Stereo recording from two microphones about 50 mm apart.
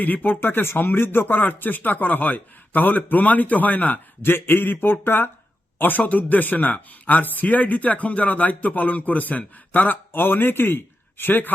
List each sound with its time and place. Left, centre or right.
0.0 s speech: left
5.8 s a man's voice: left